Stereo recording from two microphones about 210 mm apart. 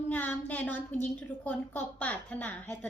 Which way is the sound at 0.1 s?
10° left (ahead or behind).